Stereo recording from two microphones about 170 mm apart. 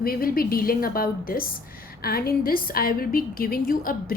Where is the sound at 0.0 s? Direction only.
60° left (ahead or behind).